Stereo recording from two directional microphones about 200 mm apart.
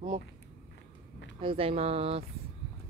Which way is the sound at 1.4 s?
25° right (ahead or behind).